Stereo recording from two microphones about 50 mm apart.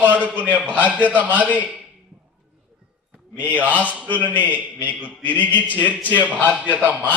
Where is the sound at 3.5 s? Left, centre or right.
Right.